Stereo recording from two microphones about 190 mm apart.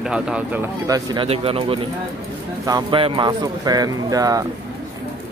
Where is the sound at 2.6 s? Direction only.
20° right (ahead or behind).